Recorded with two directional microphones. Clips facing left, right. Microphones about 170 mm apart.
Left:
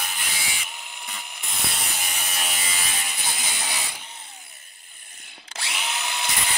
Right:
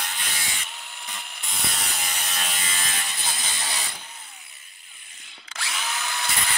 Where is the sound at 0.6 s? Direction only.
5° left (ahead or behind).